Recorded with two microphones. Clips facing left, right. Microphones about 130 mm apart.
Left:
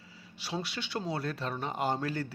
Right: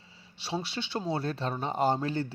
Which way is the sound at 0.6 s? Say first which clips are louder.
Right 2 dB; 25° right (ahead or behind).